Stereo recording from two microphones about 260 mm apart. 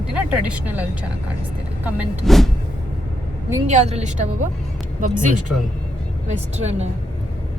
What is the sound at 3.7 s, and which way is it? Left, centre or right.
A woman's voice, right.